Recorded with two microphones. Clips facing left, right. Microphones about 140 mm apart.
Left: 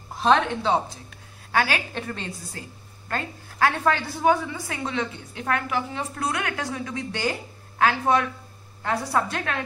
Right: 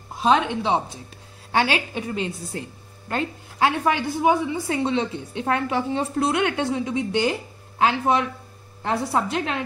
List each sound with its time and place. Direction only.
0.2 s a woman's voice: 15° right (ahead or behind)
1.1 s a sound: 25° right (ahead or behind)
2.0 s a woman's voice: 15° right (ahead or behind)
4.6 s a woman's voice: 30° right (ahead or behind)